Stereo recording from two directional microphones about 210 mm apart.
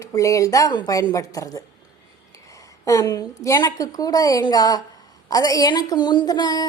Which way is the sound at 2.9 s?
15° left (ahead or behind).